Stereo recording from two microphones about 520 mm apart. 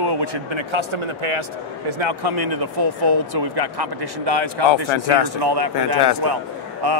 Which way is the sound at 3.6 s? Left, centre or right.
Right.